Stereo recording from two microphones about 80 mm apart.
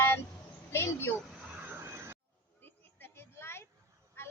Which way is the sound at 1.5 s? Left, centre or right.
Right.